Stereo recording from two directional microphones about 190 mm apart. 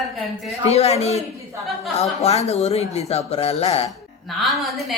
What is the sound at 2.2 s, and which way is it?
Speech, 35° left (ahead or behind).